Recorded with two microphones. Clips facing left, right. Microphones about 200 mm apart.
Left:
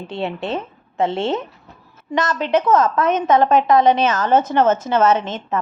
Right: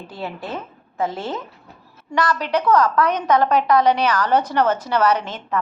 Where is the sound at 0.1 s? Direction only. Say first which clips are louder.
Left 6 dB; 25° left (ahead or behind).